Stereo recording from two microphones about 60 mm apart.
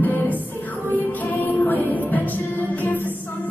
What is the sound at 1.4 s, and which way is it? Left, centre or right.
Music, left.